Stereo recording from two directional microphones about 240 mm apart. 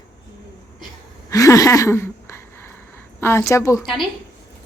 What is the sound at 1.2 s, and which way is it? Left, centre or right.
A woman's voice, centre.